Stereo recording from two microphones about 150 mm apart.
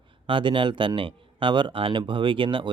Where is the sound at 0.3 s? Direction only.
35° right (ahead or behind).